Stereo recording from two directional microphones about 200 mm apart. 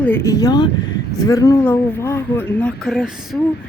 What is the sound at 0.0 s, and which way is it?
Speech, 10° left (ahead or behind).